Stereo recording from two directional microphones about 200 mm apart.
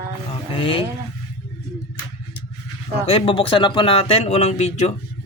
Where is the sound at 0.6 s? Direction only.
25° left (ahead or behind).